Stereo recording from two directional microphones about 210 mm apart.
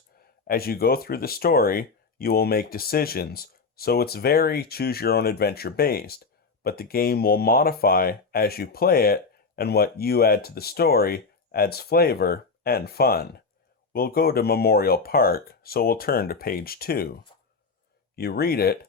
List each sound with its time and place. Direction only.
0.4 s speech: 45° left (ahead or behind)
18.2 s speech: 45° left (ahead or behind)